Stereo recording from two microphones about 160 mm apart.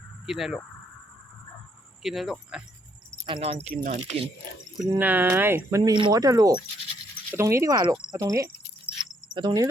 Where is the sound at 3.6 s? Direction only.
45° right (ahead or behind).